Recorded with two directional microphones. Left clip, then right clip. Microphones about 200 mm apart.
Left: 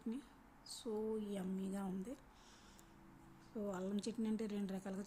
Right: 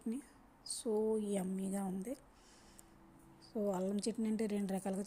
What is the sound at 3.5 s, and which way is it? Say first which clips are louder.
A woman's voice: right 7 dB; 20° right (ahead or behind).